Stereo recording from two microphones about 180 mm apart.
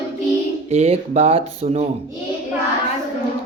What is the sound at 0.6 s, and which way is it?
Speech, 35° right (ahead or behind).